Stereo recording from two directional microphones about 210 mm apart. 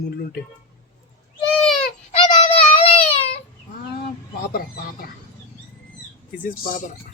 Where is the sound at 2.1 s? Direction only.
30° left (ahead or behind).